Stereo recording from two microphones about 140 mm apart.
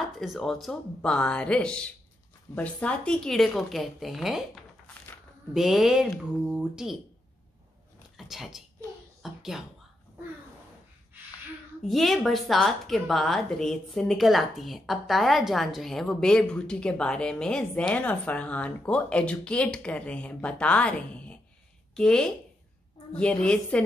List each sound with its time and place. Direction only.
0.2 s a woman's voice: centre (ahead or behind)
5.5 s a woman's voice: centre (ahead or behind)
8.2 s speech: centre (ahead or behind)
11.9 s a woman's voice: centre (ahead or behind)